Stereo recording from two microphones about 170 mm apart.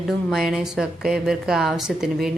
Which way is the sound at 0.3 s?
Centre (ahead or behind).